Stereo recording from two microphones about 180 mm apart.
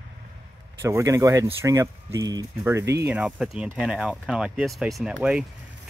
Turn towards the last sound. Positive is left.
turn(degrees=-5)  # may be behind; listen again after turning